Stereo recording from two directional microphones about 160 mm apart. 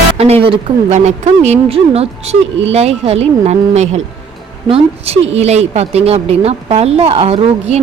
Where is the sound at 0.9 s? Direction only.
50° right (ahead or behind).